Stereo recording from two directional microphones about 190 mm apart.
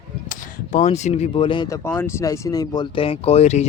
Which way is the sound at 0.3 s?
40° left (ahead or behind).